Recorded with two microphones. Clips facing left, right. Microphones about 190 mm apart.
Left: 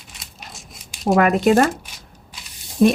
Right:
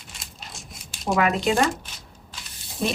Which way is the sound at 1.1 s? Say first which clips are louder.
Left 6 dB; 50° left (ahead or behind).